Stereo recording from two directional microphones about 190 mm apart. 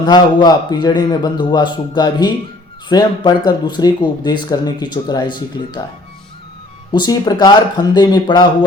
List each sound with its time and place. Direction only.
0.0 s speech: 20° left (ahead or behind)
6.9 s speech: 20° left (ahead or behind)